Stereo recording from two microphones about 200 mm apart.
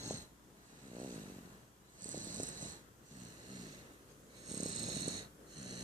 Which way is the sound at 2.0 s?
40° right (ahead or behind).